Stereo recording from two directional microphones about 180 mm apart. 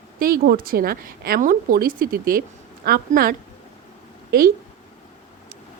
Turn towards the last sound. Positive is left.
turn(degrees=-55)  # may be behind; listen again after turning